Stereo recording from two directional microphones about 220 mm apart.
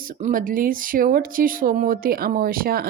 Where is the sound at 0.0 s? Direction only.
40° right (ahead or behind).